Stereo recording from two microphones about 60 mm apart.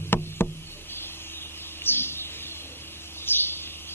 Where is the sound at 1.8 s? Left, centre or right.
Left.